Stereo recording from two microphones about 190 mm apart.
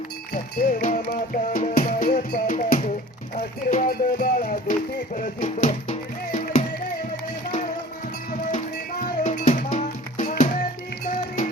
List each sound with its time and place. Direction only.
0.6 s music: 45° left (ahead or behind)
8.5 s music: 40° left (ahead or behind)